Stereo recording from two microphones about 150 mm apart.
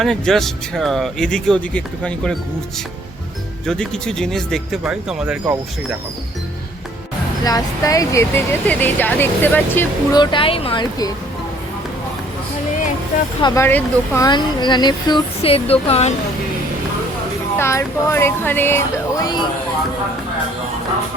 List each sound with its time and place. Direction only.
0.0 s speech: 5° left (ahead or behind)
3.7 s speech: 5° left (ahead or behind)
7.4 s speech: 25° left (ahead or behind)
10.2 s speech: 35° left (ahead or behind)
13.6 s speech: 15° left (ahead or behind)
14.3 s speech: 30° left (ahead or behind)
17.6 s speech: 20° left (ahead or behind)